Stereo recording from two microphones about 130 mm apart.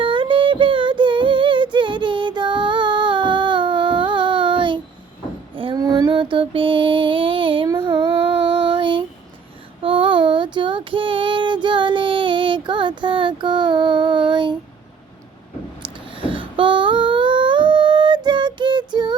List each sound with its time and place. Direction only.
0.0 s singing: 40° right (ahead or behind)
5.7 s female singing: 30° right (ahead or behind)
6.3 s child singing: 45° right (ahead or behind)
15.8 s a sound: 40° right (ahead or behind)